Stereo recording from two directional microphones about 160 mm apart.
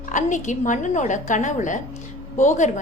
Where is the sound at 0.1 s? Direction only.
50° left (ahead or behind).